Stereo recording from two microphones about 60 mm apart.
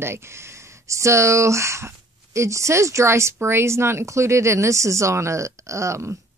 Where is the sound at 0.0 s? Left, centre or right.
Right.